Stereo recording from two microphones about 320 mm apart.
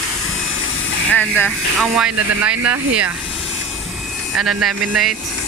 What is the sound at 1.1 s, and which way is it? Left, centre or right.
Speech, centre.